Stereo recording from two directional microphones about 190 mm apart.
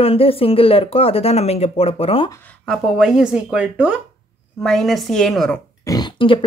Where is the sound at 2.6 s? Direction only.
Centre (ahead or behind).